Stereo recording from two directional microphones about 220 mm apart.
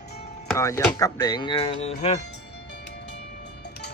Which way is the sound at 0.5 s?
15° left (ahead or behind).